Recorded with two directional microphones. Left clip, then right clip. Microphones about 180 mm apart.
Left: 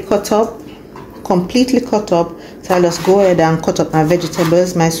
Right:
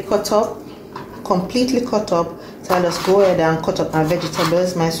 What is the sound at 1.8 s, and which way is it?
Speech, 50° left (ahead or behind).